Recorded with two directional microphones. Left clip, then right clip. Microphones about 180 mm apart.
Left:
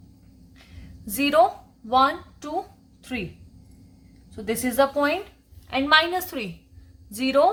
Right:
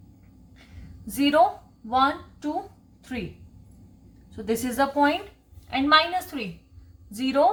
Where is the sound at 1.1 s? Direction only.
35° left (ahead or behind).